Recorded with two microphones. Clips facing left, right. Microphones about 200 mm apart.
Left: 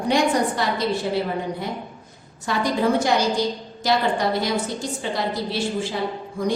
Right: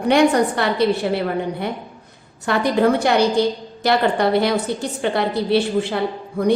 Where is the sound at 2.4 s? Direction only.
60° right (ahead or behind).